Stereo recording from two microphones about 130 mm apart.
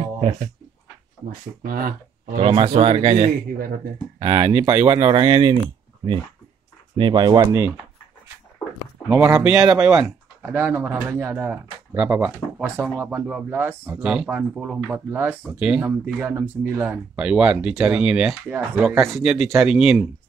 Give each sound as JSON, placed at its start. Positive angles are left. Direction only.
{"t": 0.0, "sound": "a sound", "side_deg": -55}
{"t": 1.6, "sound": "speech", "side_deg": -90}
{"t": 2.3, "sound": "a man's voice", "side_deg": -45}
{"t": 7.0, "sound": "speech", "side_deg": -35}
{"t": 9.3, "sound": "speech", "side_deg": -10}